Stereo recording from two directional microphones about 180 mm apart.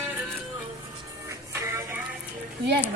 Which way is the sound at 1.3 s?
15° right (ahead or behind).